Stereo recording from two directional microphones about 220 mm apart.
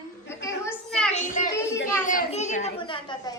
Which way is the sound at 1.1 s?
35° left (ahead or behind).